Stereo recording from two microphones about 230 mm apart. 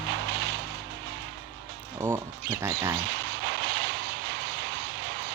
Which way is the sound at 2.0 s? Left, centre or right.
Centre.